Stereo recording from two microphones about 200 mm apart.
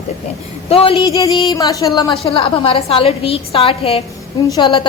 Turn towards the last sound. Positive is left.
turn(degrees=25)  # may be behind; listen again after turning